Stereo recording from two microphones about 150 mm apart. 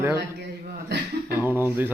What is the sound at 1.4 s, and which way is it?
Speech, 15° right (ahead or behind).